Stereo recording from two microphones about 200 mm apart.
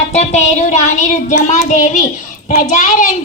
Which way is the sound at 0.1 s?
35° left (ahead or behind).